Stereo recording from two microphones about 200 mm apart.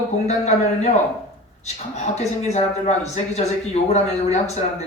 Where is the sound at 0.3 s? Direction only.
35° left (ahead or behind).